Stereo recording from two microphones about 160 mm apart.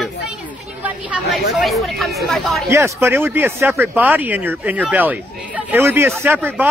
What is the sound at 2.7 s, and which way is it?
Speech, 15° right (ahead or behind).